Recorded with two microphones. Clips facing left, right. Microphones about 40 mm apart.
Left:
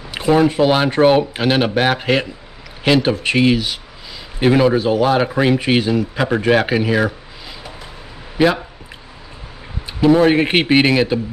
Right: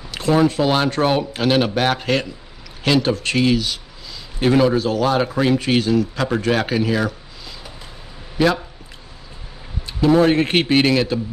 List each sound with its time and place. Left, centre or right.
0.1 s speech: centre
9.8 s speech: centre